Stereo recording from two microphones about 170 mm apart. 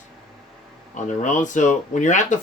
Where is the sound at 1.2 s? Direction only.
45° left (ahead or behind).